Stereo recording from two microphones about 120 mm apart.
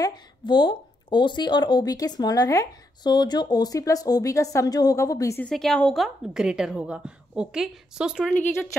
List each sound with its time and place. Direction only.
0.0 s speech: 40° left (ahead or behind)
5.4 s a woman's voice: 5° left (ahead or behind)
6.0 s a woman's voice: 5° right (ahead or behind)